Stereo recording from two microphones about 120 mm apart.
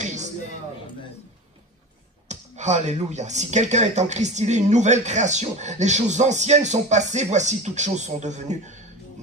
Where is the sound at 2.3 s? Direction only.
75° right (ahead or behind).